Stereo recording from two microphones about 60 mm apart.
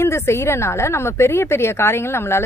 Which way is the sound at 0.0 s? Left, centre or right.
Left.